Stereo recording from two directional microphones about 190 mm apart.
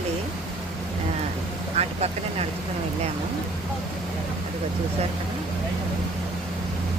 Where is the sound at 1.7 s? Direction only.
35° right (ahead or behind).